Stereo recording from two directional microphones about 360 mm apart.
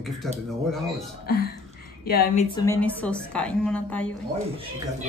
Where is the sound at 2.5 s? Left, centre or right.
Centre.